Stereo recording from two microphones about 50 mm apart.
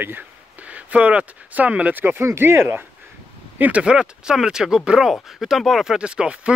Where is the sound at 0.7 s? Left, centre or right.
Right.